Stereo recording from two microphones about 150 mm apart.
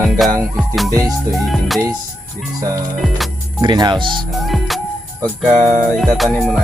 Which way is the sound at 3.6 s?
30° right (ahead or behind).